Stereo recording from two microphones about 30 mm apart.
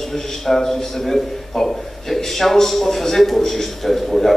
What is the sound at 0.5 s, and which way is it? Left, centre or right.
A man's voice, centre.